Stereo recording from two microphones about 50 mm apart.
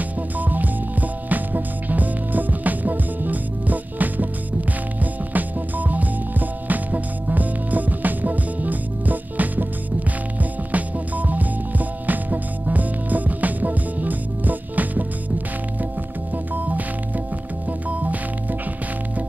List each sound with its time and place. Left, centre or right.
0.4 s music: right
5.3 s music: right
10.7 s music: right
16.5 s music: right